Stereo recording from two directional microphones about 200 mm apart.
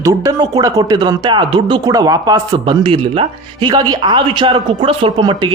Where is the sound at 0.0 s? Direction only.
15° right (ahead or behind).